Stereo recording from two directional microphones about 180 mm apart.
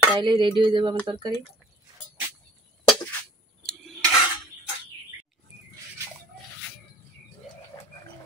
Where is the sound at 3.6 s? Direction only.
5° left (ahead or behind).